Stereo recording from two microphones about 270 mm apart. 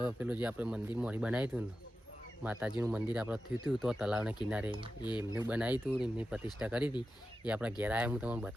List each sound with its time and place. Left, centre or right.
0.0 s speech: centre
4.9 s speech: centre
5.3 s speech: centre